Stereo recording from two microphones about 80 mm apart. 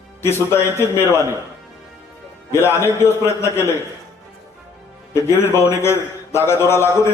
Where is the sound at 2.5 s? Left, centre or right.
Left.